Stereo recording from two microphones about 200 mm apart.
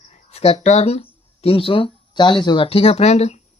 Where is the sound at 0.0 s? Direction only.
35° left (ahead or behind).